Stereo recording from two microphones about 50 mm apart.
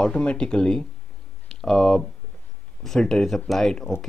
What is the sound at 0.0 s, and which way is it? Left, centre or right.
Speech, left.